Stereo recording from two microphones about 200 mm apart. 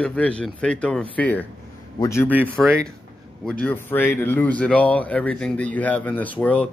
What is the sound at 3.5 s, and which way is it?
A man's voice, 5° left (ahead or behind).